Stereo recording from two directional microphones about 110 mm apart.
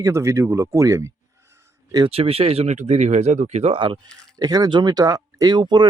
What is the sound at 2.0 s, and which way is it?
Speech, 60° right (ahead or behind).